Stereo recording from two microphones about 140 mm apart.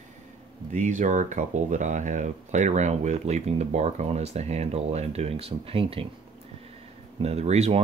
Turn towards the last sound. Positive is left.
turn(degrees=-50)  # may be behind; listen again after turning